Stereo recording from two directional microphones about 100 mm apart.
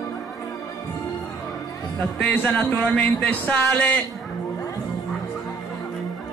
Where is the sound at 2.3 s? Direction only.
15° left (ahead or behind).